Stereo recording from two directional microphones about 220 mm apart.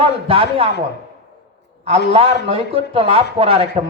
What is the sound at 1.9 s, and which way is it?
A man's voice, 25° right (ahead or behind).